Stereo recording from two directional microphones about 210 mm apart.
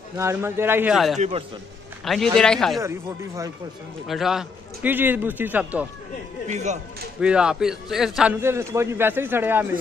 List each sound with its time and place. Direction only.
0.2 s a man's voice: 10° right (ahead or behind)
2.8 s a man's voice: 15° right (ahead or behind)
4.1 s a man's voice: centre (ahead or behind)
6.4 s speech: 35° right (ahead or behind)
7.2 s a man's voice: 5° right (ahead or behind)